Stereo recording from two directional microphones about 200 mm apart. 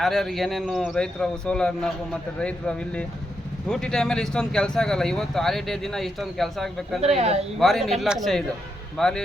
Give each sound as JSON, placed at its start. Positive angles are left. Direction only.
{"t": 0.0, "sound": "speech", "side_deg": 0}
{"t": 7.0, "sound": "speech", "side_deg": -30}
{"t": 7.6, "sound": "speech", "side_deg": 0}